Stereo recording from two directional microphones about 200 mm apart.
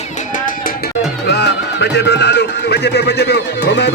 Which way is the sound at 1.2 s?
60° left (ahead or behind).